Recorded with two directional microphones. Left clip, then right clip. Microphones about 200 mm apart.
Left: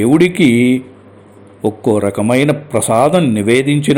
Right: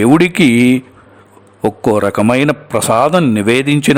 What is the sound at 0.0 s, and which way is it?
Speech, 40° right (ahead or behind).